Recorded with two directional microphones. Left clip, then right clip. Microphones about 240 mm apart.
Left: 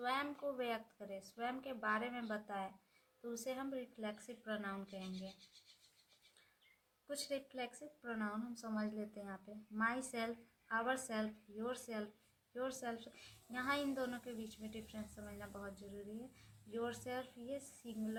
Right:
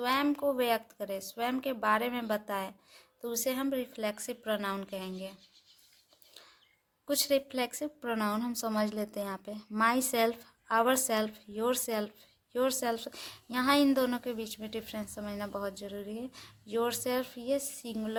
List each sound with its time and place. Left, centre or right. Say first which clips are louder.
0.0 s speech: right 11 dB; right
7.1 s speech: right 15 dB; right